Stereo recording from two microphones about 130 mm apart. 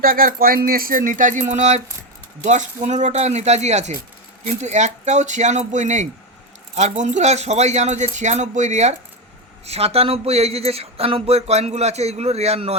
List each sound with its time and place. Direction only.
0.0 s music: 90° right; by 1.8 s 65° right (ahead or behind)
2.4 s speech: 65° right (ahead or behind)
9.6 s speech: 50° right (ahead or behind)